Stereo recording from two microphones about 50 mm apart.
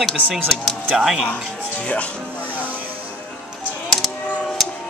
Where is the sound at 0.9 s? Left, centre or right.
Centre.